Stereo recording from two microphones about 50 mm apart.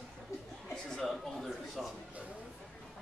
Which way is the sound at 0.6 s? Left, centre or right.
Centre.